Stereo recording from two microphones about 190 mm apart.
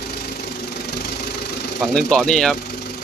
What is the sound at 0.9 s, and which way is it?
Engine, 60° left (ahead or behind).